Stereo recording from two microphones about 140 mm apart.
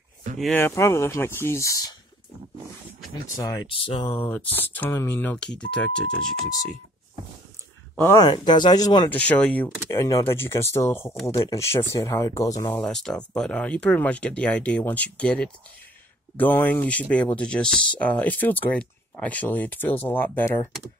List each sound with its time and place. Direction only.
0.6 s speech: 15° left (ahead or behind)
3.3 s speech: 25° left (ahead or behind)
3.7 s speech: 40° left (ahead or behind)
4.1 s speech: 15° left (ahead or behind)
8.2 s speech: 30° left (ahead or behind)
9.1 s speech: 10° left (ahead or behind)
9.8 s speech: 20° left (ahead or behind)
12.7 s speech: 5° left (ahead or behind)